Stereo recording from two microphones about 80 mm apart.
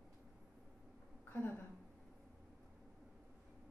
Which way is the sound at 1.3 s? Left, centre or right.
Left.